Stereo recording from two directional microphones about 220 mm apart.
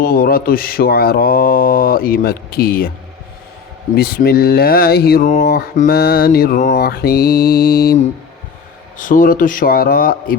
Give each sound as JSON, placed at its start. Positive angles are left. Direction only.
{"t": 0.0, "sound": "speech", "side_deg": 45}
{"t": 3.9, "sound": "a man's voice", "side_deg": 45}